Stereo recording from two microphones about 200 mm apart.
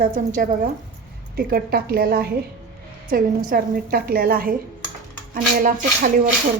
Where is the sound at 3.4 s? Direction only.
45° right (ahead or behind).